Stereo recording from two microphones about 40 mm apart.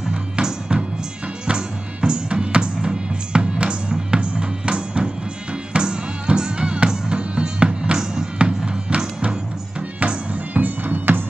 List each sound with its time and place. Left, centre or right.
0.1 s music: centre
8.4 s music: right
10.5 s music: right